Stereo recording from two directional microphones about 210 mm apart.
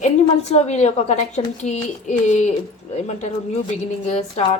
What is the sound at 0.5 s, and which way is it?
A woman's voice, 30° left (ahead or behind).